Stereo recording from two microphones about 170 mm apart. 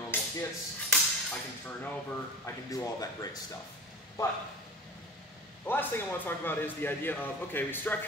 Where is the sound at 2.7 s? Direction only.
20° left (ahead or behind).